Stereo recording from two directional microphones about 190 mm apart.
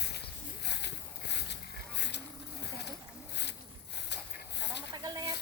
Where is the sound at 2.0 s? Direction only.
65° left (ahead or behind).